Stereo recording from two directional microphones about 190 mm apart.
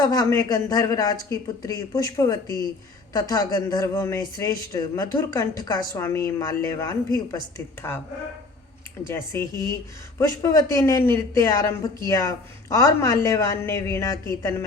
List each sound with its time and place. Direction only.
0.0 s speech: 20° left (ahead or behind)
9.0 s speech: 15° left (ahead or behind)